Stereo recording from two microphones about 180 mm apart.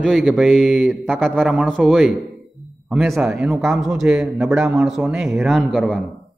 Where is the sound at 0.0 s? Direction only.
Centre (ahead or behind).